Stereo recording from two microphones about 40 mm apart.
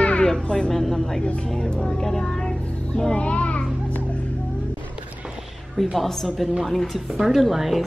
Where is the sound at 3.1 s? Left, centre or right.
Left.